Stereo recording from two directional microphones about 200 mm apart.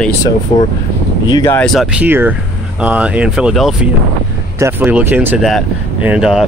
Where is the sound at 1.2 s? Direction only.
20° left (ahead or behind).